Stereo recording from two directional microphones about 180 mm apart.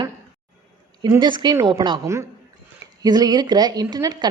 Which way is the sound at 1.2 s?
25° right (ahead or behind).